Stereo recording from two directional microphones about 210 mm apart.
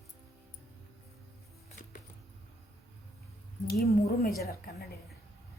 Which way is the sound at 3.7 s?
45° left (ahead or behind).